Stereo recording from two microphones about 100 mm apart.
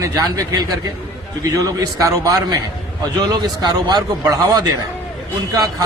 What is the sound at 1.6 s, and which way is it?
Speech, 35° right (ahead or behind).